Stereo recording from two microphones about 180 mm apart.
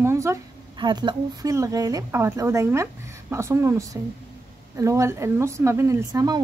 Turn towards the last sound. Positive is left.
turn(degrees=-20)  # may be behind; listen again after turning